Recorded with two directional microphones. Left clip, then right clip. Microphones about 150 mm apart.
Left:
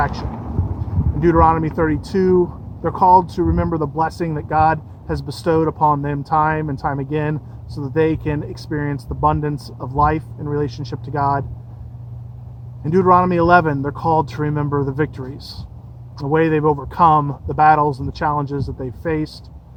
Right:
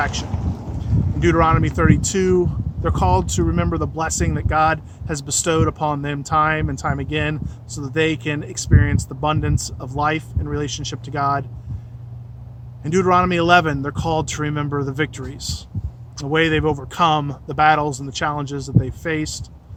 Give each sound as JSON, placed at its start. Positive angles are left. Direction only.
{"t": 1.2, "sound": "speech", "side_deg": -20}
{"t": 12.8, "sound": "speech", "side_deg": -20}